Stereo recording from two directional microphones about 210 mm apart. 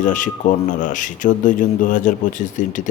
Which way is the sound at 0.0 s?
35° left (ahead or behind).